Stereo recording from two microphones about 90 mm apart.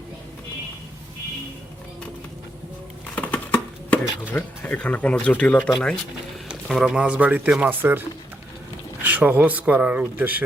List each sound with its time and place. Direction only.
3.2 s a sound: 20° left (ahead or behind)
4.4 s speech: 15° left (ahead or behind)
6.5 s speech: 5° right (ahead or behind); by 8.0 s 20° right (ahead or behind)
9.0 s speech: 20° right (ahead or behind)